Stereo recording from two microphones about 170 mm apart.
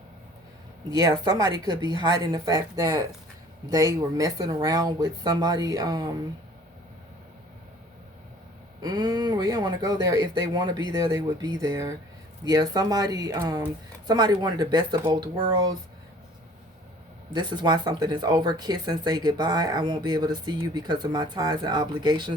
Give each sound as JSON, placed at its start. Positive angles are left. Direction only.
{"t": 0.9, "sound": "speech", "side_deg": -25}
{"t": 8.8, "sound": "speech", "side_deg": -25}
{"t": 17.3, "sound": "speech", "side_deg": -25}